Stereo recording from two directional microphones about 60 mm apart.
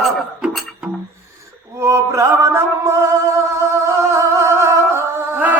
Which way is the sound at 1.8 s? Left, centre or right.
Right.